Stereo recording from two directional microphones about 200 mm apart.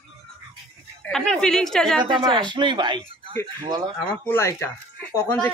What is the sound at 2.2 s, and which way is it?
A man's voice, 20° right (ahead or behind).